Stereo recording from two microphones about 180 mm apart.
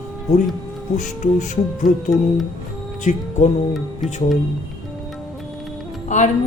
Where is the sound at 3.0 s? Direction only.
40° left (ahead or behind).